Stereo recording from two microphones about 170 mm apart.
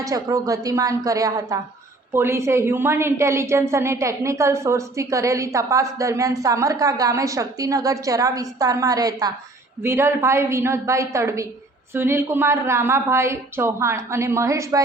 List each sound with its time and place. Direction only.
0.0 s a woman's voice: 20° right (ahead or behind)